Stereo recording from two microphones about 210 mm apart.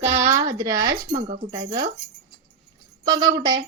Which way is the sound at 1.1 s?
35° right (ahead or behind).